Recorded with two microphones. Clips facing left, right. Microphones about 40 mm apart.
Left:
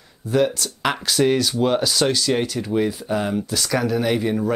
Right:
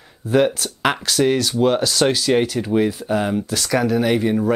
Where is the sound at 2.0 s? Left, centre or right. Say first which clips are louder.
Right 3 dB; centre.